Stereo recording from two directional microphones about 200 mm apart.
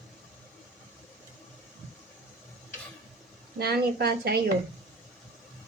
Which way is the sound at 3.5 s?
50° right (ahead or behind).